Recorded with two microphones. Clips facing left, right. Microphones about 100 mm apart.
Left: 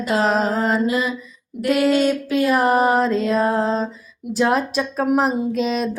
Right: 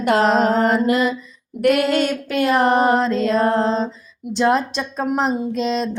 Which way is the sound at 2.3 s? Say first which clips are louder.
Left 1 dB; 60° right (ahead or behind).